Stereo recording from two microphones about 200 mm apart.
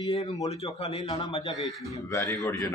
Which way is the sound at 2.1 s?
15° left (ahead or behind).